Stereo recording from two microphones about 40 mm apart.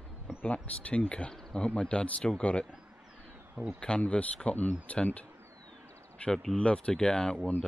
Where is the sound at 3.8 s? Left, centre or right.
Left.